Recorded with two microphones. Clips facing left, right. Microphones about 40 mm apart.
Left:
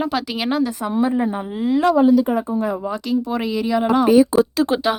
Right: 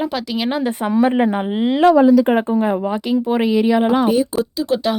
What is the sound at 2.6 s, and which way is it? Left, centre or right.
Speech, right.